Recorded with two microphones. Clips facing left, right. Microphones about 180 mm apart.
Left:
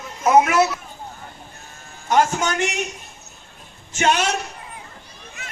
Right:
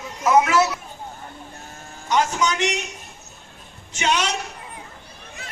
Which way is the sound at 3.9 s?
50° left (ahead or behind).